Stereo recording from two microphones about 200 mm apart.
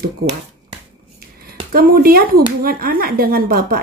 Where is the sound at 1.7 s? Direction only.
50° right (ahead or behind).